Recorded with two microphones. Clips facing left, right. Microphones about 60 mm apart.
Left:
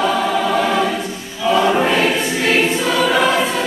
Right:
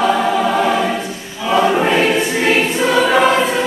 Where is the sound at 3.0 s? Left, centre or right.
Right.